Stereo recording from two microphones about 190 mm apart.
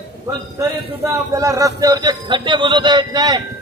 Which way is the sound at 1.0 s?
15° right (ahead or behind).